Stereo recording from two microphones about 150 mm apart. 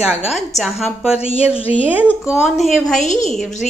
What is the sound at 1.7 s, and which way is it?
Speech, 40° left (ahead or behind).